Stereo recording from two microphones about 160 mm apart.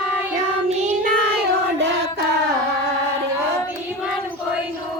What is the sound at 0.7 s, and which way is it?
Child singing, 45° right (ahead or behind).